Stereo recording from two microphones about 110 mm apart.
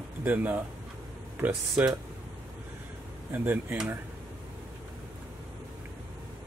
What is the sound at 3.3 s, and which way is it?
Speech, 15° right (ahead or behind).